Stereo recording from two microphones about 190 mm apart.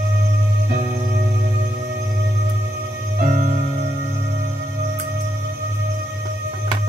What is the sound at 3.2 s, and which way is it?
Music, 40° right (ahead or behind).